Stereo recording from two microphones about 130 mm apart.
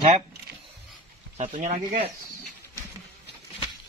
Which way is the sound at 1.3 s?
60° right (ahead or behind).